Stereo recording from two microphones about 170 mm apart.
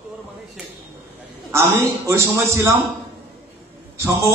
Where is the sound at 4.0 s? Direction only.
15° right (ahead or behind).